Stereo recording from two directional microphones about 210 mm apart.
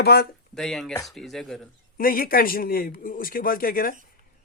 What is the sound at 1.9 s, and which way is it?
Speech, 45° left (ahead or behind).